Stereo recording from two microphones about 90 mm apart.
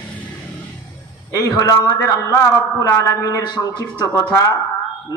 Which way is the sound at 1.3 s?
40° left (ahead or behind).